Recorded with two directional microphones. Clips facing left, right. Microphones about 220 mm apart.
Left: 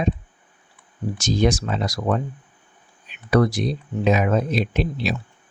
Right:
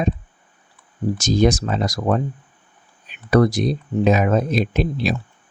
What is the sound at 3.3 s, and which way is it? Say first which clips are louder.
Speech: right 3 dB; 40° right (ahead or behind).